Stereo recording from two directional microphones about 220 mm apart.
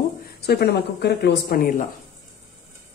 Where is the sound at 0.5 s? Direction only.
50° left (ahead or behind).